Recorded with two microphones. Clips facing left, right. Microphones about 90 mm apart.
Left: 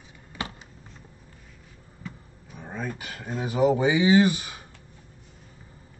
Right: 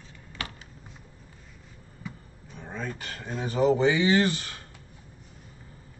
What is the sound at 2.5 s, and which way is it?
Speech, 10° left (ahead or behind).